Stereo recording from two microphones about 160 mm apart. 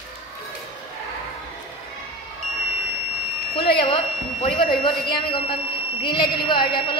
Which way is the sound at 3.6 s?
35° left (ahead or behind).